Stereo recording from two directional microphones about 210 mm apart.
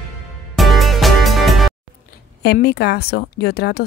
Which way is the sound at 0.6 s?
Centre (ahead or behind).